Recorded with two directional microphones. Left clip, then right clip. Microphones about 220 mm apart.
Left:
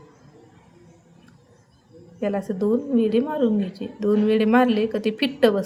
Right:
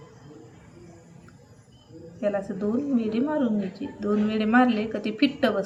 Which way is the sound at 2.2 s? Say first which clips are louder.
Left 2 dB; 50° left (ahead or behind).